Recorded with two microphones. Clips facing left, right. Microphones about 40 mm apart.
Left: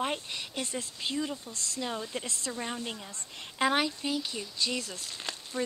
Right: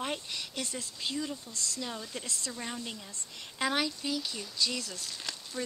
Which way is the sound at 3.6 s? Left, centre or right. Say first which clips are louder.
Left 3 dB; left.